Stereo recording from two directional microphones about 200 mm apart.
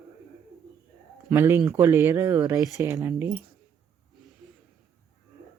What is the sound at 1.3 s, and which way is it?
Speech, 10° right (ahead or behind).